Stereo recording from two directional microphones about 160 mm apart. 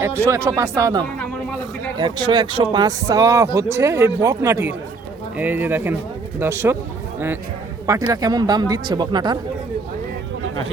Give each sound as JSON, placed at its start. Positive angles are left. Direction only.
{"t": 0.0, "sound": "speech", "side_deg": -15}
{"t": 7.9, "sound": "speech", "side_deg": -20}